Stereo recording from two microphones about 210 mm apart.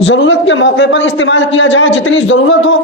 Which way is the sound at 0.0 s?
60° left (ahead or behind).